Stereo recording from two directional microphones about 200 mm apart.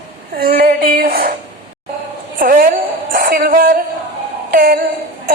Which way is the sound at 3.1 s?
45° right (ahead or behind).